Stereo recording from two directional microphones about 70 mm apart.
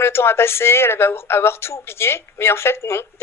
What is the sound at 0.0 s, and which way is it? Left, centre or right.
Speech, left.